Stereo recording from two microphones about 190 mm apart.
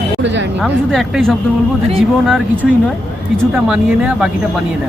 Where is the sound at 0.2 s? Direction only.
70° right (ahead or behind).